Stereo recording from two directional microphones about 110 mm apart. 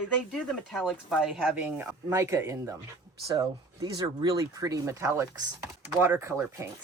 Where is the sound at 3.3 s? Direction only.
40° right (ahead or behind); by 6.7 s 25° right (ahead or behind).